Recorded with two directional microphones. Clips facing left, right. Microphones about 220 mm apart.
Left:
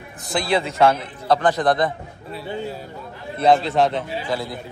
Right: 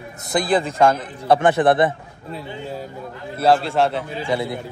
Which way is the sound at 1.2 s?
30° right (ahead or behind).